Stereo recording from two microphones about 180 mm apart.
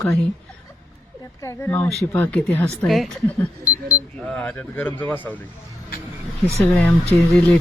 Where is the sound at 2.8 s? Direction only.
Centre (ahead or behind).